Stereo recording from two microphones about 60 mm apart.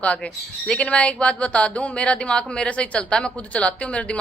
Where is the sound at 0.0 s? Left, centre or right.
Left.